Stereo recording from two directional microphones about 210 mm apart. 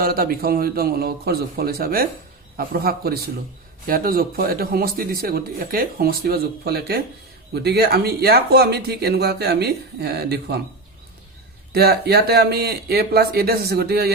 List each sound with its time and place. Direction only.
0.0 s speech: 45° right (ahead or behind)
11.7 s speech: 50° right (ahead or behind)